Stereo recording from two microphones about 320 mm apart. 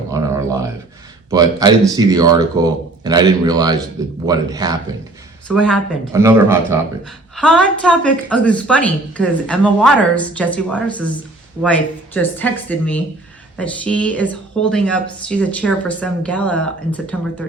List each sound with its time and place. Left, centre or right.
0.1 s a sound: centre
1.3 s speech: centre
5.5 s a woman's voice: centre
6.1 s a woman's voice: centre